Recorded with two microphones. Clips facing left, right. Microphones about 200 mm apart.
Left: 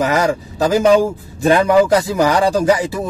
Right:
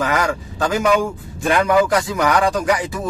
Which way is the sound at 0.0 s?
20° left (ahead or behind).